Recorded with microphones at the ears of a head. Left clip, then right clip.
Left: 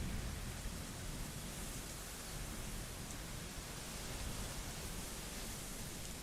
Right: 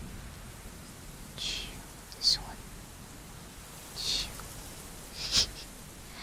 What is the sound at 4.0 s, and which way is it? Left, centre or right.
Rain, right.